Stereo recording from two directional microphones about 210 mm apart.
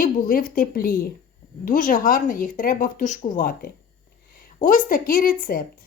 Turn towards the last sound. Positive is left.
turn(degrees=40)  # may be behind; listen again after turning